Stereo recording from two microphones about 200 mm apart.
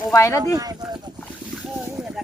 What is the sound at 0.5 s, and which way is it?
Speech, 15° right (ahead or behind).